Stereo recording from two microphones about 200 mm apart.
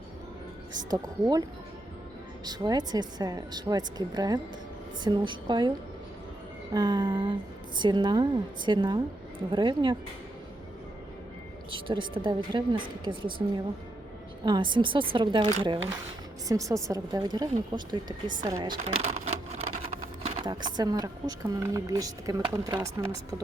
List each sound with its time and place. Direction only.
0.8 s speech: 20° right (ahead or behind)
6.7 s speech: 20° right (ahead or behind)
11.7 s speech: 25° right (ahead or behind)
14.4 s speech: 25° right (ahead or behind)
18.8 s a sound: 35° right (ahead or behind)
20.2 s speech: 20° right (ahead or behind)